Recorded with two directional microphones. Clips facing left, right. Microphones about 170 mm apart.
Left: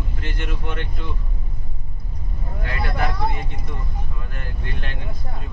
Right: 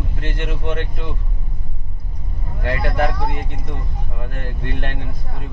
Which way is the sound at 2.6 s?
65° right (ahead or behind).